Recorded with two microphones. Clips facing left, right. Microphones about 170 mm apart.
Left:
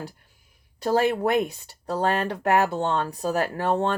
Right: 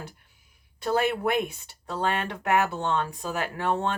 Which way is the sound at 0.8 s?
40° left (ahead or behind).